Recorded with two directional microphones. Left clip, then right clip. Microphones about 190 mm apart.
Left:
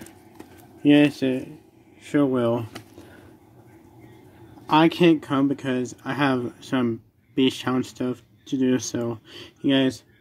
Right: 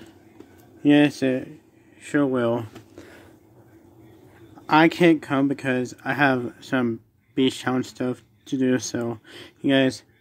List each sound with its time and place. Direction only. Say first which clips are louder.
0.8 s speech: even; 10° right (ahead or behind)
2.0 s speech: even; 5° right (ahead or behind)
4.6 s speech: right 1 dB; 10° right (ahead or behind)